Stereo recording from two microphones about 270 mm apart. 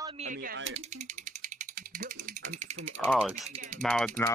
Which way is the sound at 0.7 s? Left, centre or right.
Right.